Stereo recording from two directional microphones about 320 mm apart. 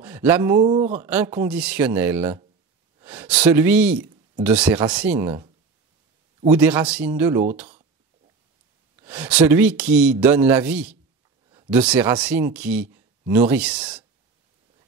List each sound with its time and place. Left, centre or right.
0.0 s speech: centre
0.7 s speech: right
1.0 s speech: centre
6.5 s speech: centre
8.9 s speech: centre